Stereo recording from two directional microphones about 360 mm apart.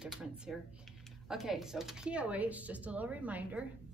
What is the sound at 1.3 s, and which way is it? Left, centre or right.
Speech, centre.